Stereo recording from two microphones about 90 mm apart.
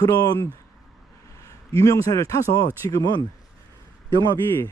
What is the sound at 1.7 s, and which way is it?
Speech, 40° left (ahead or behind).